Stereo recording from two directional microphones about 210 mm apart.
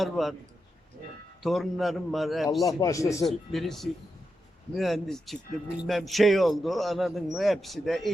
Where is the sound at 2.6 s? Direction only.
15° left (ahead or behind).